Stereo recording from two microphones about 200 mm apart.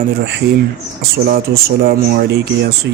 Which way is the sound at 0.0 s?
55° right (ahead or behind).